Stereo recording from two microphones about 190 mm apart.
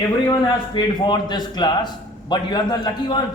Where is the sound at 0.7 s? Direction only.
25° left (ahead or behind).